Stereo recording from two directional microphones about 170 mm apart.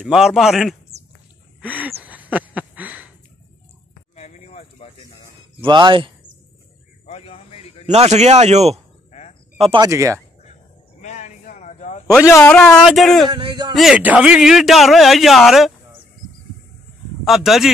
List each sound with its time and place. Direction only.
0.0 s a man's voice: centre (ahead or behind)
1.6 s a sound: 10° right (ahead or behind)
4.1 s a sound: 40° left (ahead or behind)
5.7 s speech: 30° right (ahead or behind)
7.1 s a sound: 35° left (ahead or behind)
7.8 s speech: 40° right (ahead or behind)
9.8 s speech: 15° right (ahead or behind)
11.0 s a sound: 45° left (ahead or behind)
12.1 s a man's voice: 15° left (ahead or behind)
12.4 s a man's voice: 5° left (ahead or behind)
13.3 s speech: 25° right (ahead or behind)
13.7 s a man's voice: 5° right (ahead or behind)
17.3 s a man's voice: centre (ahead or behind)